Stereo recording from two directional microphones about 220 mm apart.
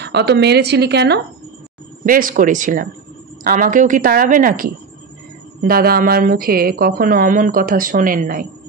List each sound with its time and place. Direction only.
0.0 s a woman's voice: 50° right (ahead or behind)